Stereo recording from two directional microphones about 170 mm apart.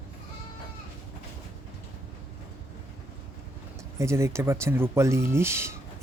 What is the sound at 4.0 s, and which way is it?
Speech, 15° right (ahead or behind).